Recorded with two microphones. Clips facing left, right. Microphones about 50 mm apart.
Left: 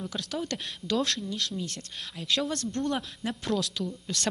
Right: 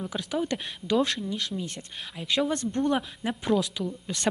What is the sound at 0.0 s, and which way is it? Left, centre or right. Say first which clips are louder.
Speech: right 4 dB; centre.